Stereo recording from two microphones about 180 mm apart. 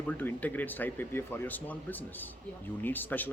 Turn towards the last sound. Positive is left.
turn(degrees=10)  # may be behind; listen again after turning